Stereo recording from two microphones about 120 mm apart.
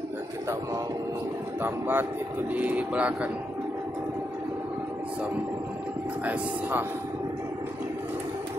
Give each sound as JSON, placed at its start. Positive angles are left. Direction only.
{"t": 1.6, "sound": "speech", "side_deg": -15}
{"t": 6.2, "sound": "speech", "side_deg": -15}